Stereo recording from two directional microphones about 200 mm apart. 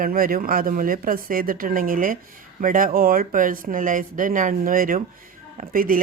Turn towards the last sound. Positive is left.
turn(degrees=-45)  # may be behind; listen again after turning